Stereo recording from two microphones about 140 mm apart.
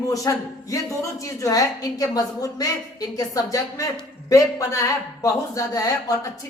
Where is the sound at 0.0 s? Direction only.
25° left (ahead or behind).